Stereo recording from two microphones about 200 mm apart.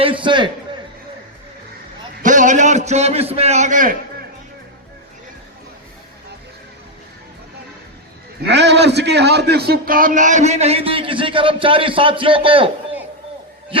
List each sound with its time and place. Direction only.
0.0 s a man's voice: 25° right (ahead or behind)
2.2 s a sound: 40° right (ahead or behind)
8.4 s a man's voice: 60° right (ahead or behind); by 12.6 s 25° right (ahead or behind)